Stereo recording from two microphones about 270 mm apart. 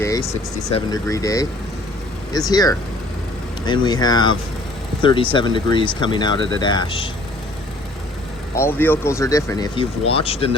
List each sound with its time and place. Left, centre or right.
0.7 s speech: centre
2.5 s speech: centre
8.5 s speech: centre